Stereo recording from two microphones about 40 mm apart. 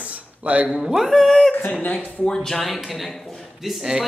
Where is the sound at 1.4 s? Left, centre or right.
Centre.